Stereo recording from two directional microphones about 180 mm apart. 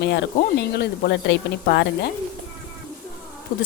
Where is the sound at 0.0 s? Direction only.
70° left (ahead or behind).